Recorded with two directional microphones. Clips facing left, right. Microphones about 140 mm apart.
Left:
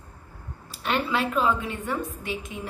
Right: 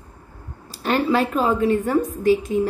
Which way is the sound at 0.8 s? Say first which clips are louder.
Right 6 dB; 40° right (ahead or behind).